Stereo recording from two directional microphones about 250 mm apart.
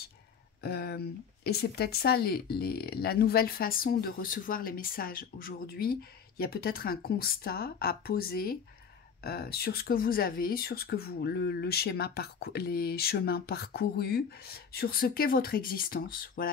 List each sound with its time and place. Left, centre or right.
0.6 s speech: left